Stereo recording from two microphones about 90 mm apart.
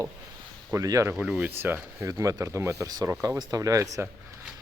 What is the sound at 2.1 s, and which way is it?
Speech, 40° right (ahead or behind).